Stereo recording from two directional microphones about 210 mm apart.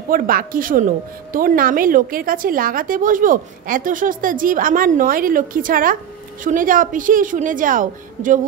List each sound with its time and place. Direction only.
0.1 s a woman's voice: 45° right (ahead or behind)